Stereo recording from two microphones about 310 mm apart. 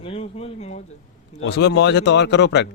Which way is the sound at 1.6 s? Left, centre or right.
Left.